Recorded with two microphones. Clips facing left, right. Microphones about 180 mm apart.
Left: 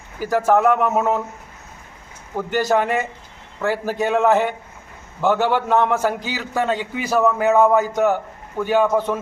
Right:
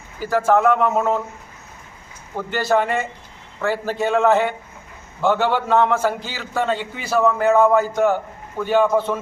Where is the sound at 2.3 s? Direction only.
15° left (ahead or behind).